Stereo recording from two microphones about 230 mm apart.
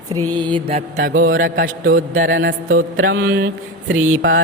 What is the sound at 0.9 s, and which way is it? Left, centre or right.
A man's voice, right.